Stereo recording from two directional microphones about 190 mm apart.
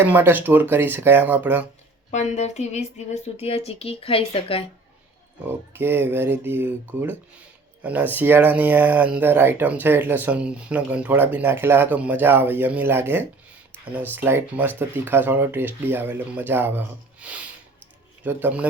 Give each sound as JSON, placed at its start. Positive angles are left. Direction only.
{"t": 0.0, "sound": "speech", "side_deg": -10}
{"t": 2.0, "sound": "a woman's voice", "side_deg": 35}
{"t": 5.7, "sound": "speech", "side_deg": -10}